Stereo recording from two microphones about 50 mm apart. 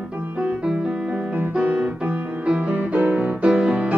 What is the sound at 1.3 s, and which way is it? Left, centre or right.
Piano, right.